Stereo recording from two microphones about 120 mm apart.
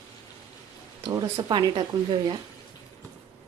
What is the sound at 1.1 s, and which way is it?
Speech, 35° right (ahead or behind).